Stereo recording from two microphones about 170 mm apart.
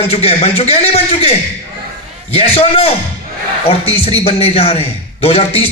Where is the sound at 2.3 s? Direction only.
35° left (ahead or behind).